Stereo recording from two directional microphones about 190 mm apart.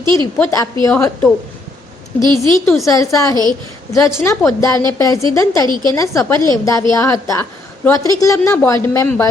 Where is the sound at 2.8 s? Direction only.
15° left (ahead or behind).